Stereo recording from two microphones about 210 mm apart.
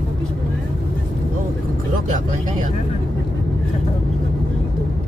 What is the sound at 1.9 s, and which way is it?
Speech, 35° right (ahead or behind).